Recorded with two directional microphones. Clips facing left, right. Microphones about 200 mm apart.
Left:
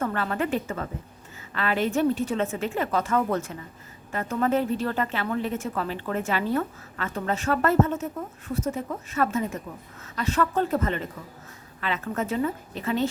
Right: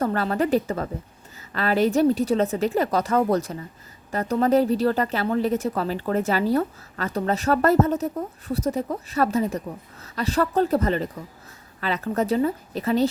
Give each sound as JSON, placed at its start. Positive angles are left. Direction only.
{"t": 0.0, "sound": "a woman's voice", "side_deg": -35}